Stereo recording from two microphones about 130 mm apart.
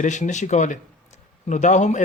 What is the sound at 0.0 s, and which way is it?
Speech, 70° left (ahead or behind).